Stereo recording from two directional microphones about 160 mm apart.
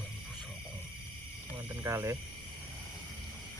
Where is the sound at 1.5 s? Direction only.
20° right (ahead or behind).